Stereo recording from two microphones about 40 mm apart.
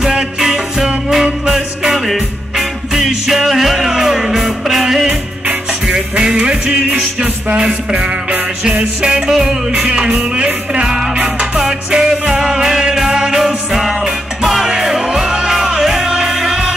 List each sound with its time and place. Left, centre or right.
0.0 s music: centre
7.4 s music: right
9.3 s music: centre
9.7 s music: right